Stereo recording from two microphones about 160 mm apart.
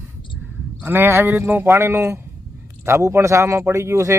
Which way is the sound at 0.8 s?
10° right (ahead or behind).